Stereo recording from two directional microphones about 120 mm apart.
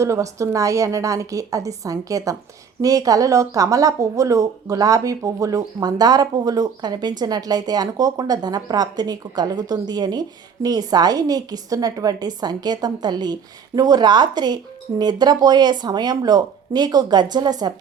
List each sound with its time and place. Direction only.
0.0 s a woman's voice: 25° right (ahead or behind)